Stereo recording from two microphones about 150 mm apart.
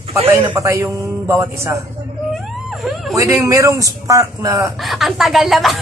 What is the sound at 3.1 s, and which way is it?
Speech, 20° right (ahead or behind).